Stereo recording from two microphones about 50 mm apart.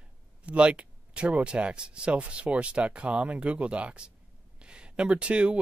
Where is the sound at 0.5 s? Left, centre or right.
Right.